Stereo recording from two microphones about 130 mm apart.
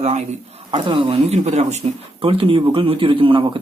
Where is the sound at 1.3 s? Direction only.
60° right (ahead or behind).